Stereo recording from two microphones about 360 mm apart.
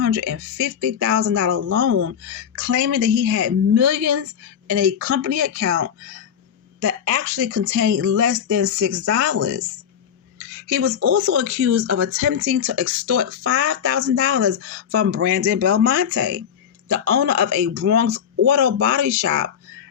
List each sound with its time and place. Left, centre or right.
0.0 s speech: right
10.3 s speech: right